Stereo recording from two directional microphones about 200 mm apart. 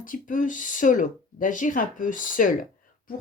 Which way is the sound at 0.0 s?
40° left (ahead or behind).